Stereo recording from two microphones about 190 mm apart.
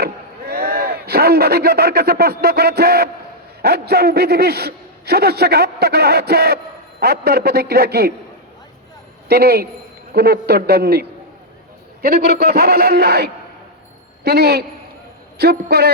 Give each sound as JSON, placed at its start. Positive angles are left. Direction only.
{"t": 0.0, "sound": "a man's voice", "side_deg": -55}
{"t": 9.3, "sound": "a man's voice", "side_deg": -55}
{"t": 12.0, "sound": "a man's voice", "side_deg": -60}